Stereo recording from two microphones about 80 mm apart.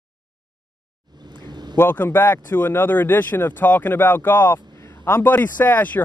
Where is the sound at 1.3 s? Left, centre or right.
Right.